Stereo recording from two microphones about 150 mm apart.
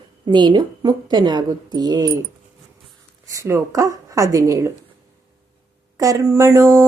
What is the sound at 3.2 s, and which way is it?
Speech, 20° right (ahead or behind).